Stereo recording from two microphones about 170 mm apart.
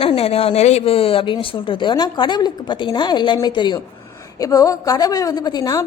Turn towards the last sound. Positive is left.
turn(degrees=20)  # may be behind; listen again after turning